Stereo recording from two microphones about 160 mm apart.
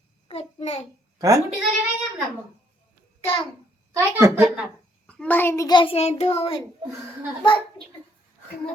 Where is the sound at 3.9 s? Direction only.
20° right (ahead or behind).